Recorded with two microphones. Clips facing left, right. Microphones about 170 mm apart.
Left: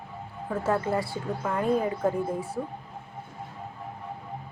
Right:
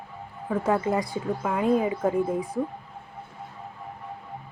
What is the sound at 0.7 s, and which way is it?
Speech, 15° right (ahead or behind).